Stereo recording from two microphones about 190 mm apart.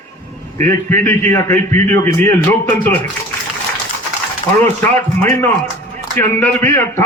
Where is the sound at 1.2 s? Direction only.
15° left (ahead or behind).